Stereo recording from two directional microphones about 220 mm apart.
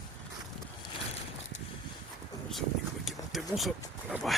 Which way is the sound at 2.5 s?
Centre (ahead or behind).